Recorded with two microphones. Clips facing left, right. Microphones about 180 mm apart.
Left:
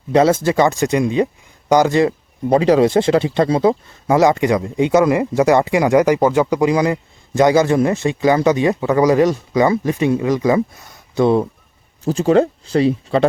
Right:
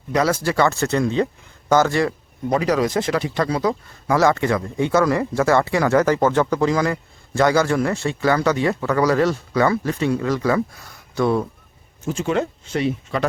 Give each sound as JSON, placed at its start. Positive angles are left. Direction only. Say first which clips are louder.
{"t": 0.1, "sound": "speech", "louder": "left 6 dB", "side_deg": 25}
{"t": 12.0, "sound": "speech", "louder": "left 8 dB", "side_deg": 35}